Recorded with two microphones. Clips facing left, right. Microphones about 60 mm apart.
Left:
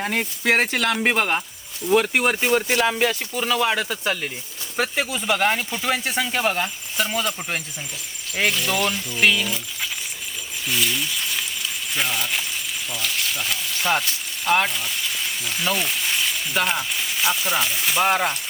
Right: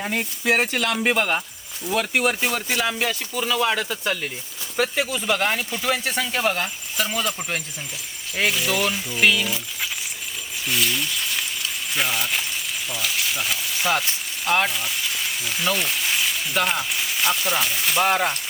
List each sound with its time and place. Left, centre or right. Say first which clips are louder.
0.0 s speech: left 1 dB; left
1.1 s speech: even; centre
1.9 s speech: left 3 dB; left; by 9.9 s centre
10.7 s a sound: even; centre
12.9 s frying: right 1 dB; centre
14.4 s speech: left 1 dB; centre